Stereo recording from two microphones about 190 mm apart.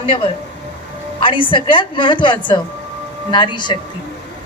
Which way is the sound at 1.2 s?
25° left (ahead or behind).